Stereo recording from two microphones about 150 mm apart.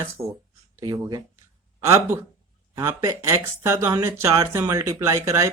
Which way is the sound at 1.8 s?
20° right (ahead or behind).